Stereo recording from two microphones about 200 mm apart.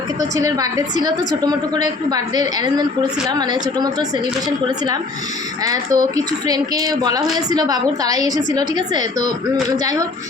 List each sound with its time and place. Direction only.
0.2 s a woman's voice: 20° right (ahead or behind)
5.6 s a woman's voice: 15° right (ahead or behind)